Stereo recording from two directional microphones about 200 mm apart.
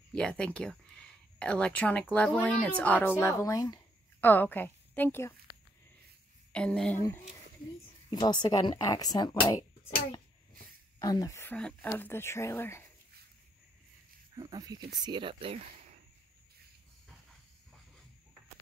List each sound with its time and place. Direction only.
0.1 s speech: 5° left (ahead or behind)
8.1 s speech: 20° left (ahead or behind)
11.0 s speech: 15° left (ahead or behind)
14.3 s speech: 20° right (ahead or behind)